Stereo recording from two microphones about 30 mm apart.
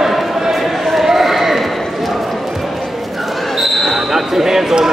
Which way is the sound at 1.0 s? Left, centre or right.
Centre.